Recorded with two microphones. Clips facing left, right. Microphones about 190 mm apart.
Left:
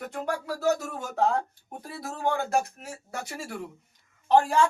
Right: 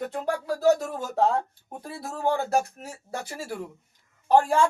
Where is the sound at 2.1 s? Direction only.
35° right (ahead or behind).